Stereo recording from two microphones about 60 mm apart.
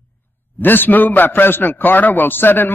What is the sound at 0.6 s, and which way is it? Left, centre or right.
A man's voice, left.